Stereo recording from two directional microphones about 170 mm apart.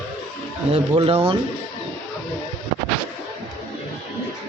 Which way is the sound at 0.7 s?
35° right (ahead or behind).